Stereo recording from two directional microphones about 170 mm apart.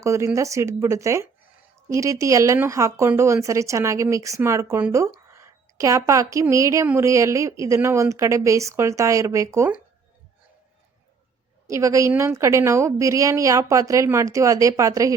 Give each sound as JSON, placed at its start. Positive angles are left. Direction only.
{"t": 0.0, "sound": "a woman's voice", "side_deg": -15}
{"t": 11.7, "sound": "a woman's voice", "side_deg": -20}